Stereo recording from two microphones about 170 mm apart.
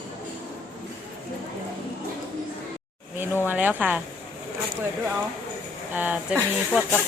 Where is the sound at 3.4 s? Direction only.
10° right (ahead or behind).